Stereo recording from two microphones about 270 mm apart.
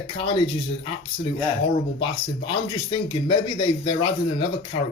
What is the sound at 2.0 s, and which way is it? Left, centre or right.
A man's voice, centre.